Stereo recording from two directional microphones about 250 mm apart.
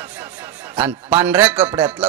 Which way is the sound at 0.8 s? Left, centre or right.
Centre.